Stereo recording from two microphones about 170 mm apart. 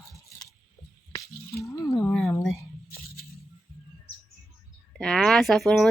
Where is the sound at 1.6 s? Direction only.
20° left (ahead or behind).